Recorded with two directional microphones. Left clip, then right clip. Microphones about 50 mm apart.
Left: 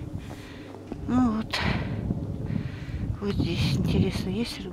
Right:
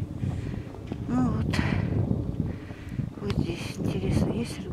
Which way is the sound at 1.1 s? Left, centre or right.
Left.